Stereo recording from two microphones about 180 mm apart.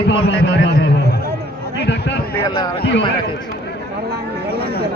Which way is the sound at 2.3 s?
15° left (ahead or behind).